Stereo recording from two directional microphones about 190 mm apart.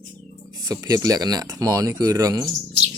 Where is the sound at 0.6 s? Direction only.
15° right (ahead or behind).